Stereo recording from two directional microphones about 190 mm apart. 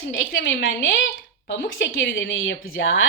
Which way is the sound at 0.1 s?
75° left (ahead or behind).